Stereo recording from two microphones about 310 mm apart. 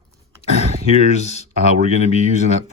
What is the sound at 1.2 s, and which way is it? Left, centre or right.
Speech, left.